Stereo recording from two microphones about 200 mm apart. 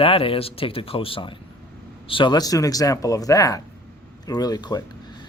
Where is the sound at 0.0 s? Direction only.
30° left (ahead or behind).